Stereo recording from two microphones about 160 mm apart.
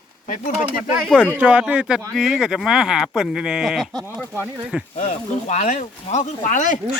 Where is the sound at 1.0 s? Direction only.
5° left (ahead or behind).